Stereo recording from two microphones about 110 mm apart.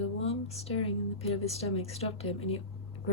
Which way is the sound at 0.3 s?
70° left (ahead or behind).